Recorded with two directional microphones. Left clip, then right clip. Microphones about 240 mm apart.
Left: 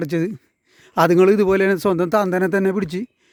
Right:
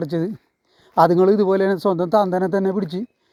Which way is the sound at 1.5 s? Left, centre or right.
Left.